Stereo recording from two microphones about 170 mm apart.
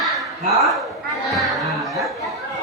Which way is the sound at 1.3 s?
Centre (ahead or behind).